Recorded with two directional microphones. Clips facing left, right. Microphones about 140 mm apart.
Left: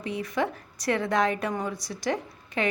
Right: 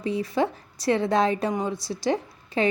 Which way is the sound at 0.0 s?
30° right (ahead or behind).